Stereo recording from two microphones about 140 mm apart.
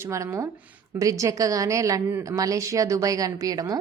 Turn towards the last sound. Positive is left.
turn(degrees=-25)  # may be behind; listen again after turning